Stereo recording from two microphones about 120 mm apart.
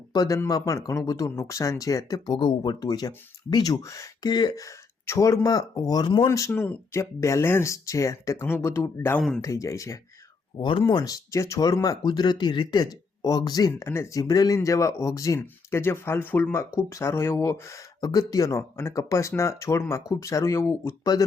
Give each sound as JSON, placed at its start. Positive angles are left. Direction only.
{"t": 0.1, "sound": "speech", "side_deg": 35}
{"t": 6.2, "sound": "speech", "side_deg": 25}
{"t": 6.5, "sound": "speech", "side_deg": 15}
{"t": 10.6, "sound": "speech", "side_deg": 40}